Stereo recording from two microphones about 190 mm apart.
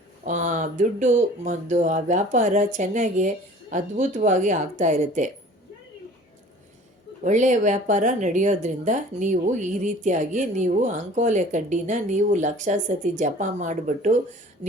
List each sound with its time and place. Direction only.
0.3 s speech: 40° right (ahead or behind)
7.3 s speech: 40° right (ahead or behind)